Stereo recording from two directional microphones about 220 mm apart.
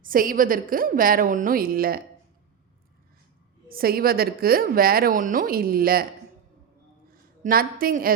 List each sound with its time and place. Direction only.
0.0 s a woman's voice: 40° right (ahead or behind)
3.7 s a woman's voice: 40° right (ahead or behind)
7.1 s a woman's voice: 40° right (ahead or behind)